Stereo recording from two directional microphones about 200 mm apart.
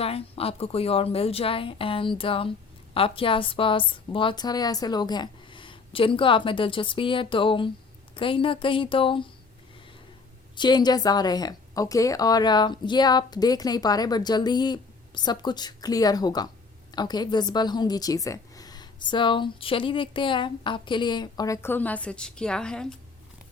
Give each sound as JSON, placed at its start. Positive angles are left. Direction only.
{"t": 0.0, "sound": "a woman's voice", "side_deg": 30}
{"t": 10.5, "sound": "a woman's voice", "side_deg": 20}